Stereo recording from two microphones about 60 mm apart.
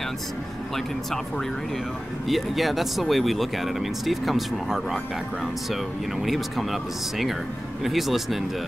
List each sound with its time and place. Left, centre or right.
2.2 s speech: centre